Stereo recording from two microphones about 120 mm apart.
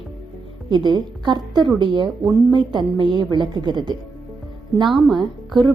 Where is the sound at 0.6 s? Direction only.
40° right (ahead or behind).